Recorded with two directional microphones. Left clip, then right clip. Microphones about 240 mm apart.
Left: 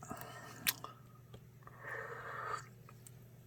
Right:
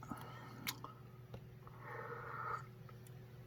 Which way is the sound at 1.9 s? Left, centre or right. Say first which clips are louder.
Left 3 dB; left.